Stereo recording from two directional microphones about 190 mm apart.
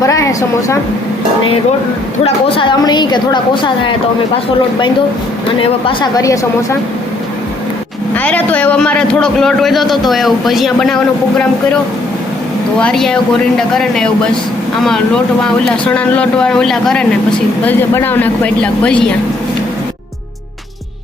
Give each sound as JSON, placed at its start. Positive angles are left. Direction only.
{"t": 0.0, "sound": "a woman's voice", "side_deg": 15}
{"t": 2.2, "sound": "a woman's voice", "side_deg": 30}
{"t": 5.5, "sound": "a woman's voice", "side_deg": 20}
{"t": 8.1, "sound": "a man's voice", "side_deg": 10}
{"t": 12.8, "sound": "a man's voice", "side_deg": 5}